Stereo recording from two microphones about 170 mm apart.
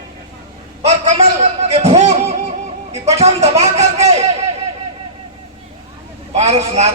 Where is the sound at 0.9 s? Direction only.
40° right (ahead or behind).